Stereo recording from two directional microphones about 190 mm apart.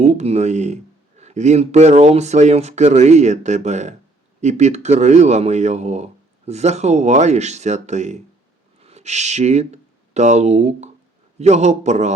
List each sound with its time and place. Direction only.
0.0 s speech: 35° right (ahead or behind)